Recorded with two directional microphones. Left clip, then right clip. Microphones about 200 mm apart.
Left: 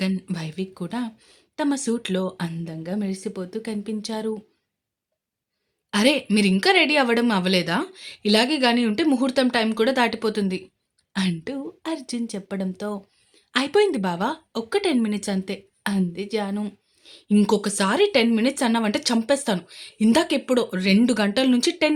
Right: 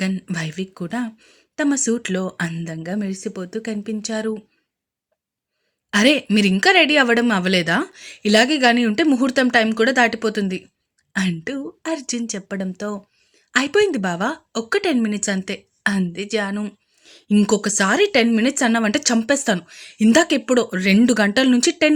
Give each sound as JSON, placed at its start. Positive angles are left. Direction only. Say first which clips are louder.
{"t": 0.0, "sound": "speech", "louder": "right 3 dB", "side_deg": -15}
{"t": 5.9, "sound": "speech", "louder": "right 4 dB", "side_deg": -20}